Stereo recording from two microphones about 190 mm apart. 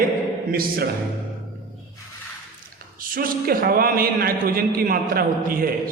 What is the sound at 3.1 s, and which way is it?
A man's voice, 50° right (ahead or behind).